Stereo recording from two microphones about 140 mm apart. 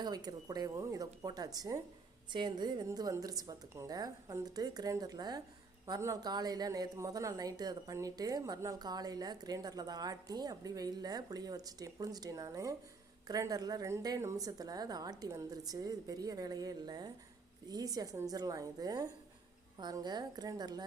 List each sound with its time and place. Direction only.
0.0 s a woman's voice: 30° right (ahead or behind)